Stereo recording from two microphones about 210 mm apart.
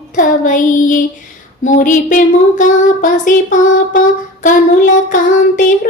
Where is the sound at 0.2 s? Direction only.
40° left (ahead or behind).